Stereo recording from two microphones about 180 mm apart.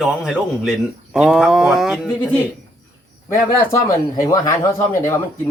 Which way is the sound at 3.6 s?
15° left (ahead or behind).